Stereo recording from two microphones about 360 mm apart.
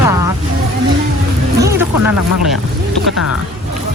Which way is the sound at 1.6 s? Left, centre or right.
Centre.